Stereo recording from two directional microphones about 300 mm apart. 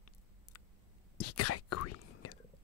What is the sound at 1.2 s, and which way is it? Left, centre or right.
Whispering, left.